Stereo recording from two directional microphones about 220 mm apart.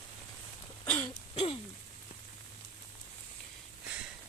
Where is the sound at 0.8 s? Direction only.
10° left (ahead or behind).